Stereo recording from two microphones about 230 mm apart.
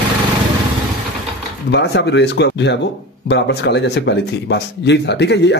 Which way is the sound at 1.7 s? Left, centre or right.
Left.